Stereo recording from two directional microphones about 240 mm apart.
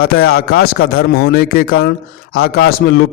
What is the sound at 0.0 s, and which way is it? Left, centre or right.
A man's voice, left.